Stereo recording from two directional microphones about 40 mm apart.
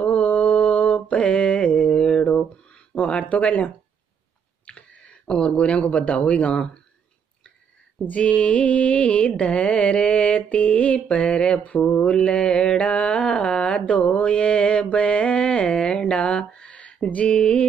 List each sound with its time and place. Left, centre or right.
0.0 s mantra: left
3.0 s music: left
4.6 s a sound: left
5.2 s music: left
8.0 s music: left
12.0 s mantra: left
13.7 s mantra: left
16.0 s a sound: left
17.1 s music: left